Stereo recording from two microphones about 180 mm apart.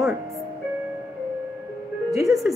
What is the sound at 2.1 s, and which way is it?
Speech, 15° right (ahead or behind).